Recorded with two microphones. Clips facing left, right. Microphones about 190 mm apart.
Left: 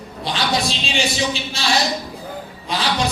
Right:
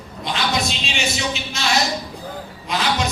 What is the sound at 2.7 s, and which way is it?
Speech, 35° left (ahead or behind).